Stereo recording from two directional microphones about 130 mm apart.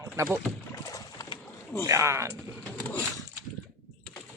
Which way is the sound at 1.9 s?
20° right (ahead or behind).